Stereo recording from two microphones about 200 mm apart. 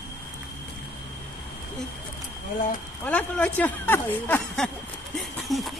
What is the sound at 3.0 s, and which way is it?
A woman's voice, 5° left (ahead or behind).